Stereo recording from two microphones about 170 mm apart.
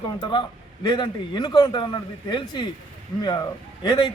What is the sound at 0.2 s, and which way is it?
A man's voice, 30° left (ahead or behind).